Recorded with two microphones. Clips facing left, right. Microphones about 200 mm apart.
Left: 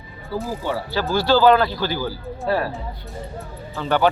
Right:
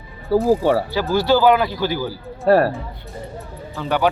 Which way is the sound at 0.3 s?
35° right (ahead or behind).